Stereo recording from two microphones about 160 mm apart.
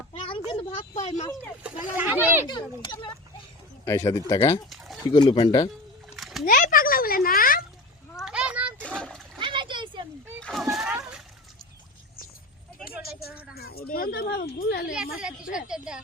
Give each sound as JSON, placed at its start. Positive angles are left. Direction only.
{"t": 0.1, "sound": "a sound", "side_deg": 30}
{"t": 0.9, "sound": "speech", "side_deg": 50}
{"t": 1.6, "sound": "speech", "side_deg": -10}
{"t": 2.5, "sound": "a child's voice", "side_deg": 30}
{"t": 6.1, "sound": "splash", "side_deg": 0}
{"t": 6.4, "sound": "speech", "side_deg": 60}
{"t": 8.2, "sound": "a sound", "side_deg": -5}
{"t": 8.8, "sound": "splash", "side_deg": 5}
{"t": 9.4, "sound": "splash", "side_deg": -30}
{"t": 10.4, "sound": "splash", "side_deg": 0}
{"t": 13.5, "sound": "a sound", "side_deg": 75}
{"t": 13.9, "sound": "speech", "side_deg": 70}
{"t": 15.5, "sound": "a woman's voice", "side_deg": -5}